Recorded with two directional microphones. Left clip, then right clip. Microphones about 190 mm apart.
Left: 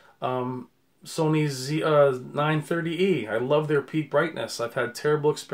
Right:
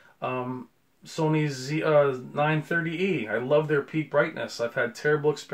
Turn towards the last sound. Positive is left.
turn(degrees=35)  # may be behind; listen again after turning